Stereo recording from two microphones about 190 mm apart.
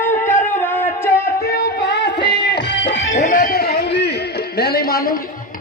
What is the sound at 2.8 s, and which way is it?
Music, 40° left (ahead or behind).